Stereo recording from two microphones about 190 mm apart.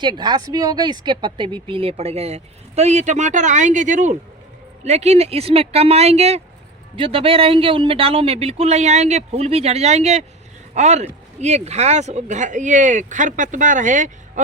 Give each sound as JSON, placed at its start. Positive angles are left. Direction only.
{"t": 0.0, "sound": "speech", "side_deg": -20}